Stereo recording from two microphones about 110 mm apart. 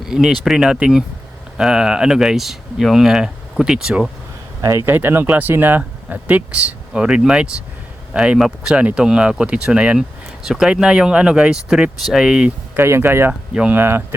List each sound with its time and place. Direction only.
0.0 s speech: 5° right (ahead or behind)
4.9 s speech: 20° right (ahead or behind)
12.7 s speech: 20° right (ahead or behind)
13.5 s speech: 10° right (ahead or behind)
13.7 s speech: 20° right (ahead or behind)